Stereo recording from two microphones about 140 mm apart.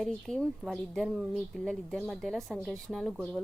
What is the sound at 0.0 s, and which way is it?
A woman's voice, 5° left (ahead or behind).